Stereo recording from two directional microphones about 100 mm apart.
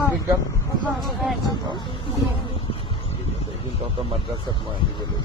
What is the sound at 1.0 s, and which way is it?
Speech, centre (ahead or behind).